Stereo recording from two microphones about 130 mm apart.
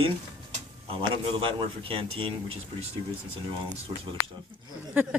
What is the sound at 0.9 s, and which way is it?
Speech, 45° right (ahead or behind).